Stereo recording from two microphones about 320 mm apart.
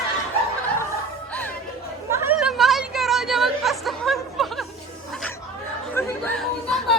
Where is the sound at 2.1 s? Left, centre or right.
Centre.